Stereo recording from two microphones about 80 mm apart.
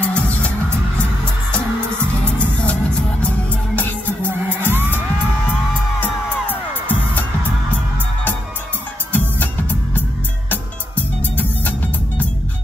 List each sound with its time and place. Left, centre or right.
0.0 s music: centre
4.3 s music: right
6.9 s music: left
9.1 s music: left
11.3 s music: left